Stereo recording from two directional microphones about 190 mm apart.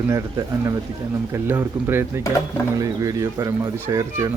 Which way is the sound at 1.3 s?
15° right (ahead or behind).